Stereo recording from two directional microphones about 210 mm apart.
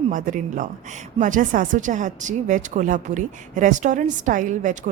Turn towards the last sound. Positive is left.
turn(degrees=-35)  # may be behind; listen again after turning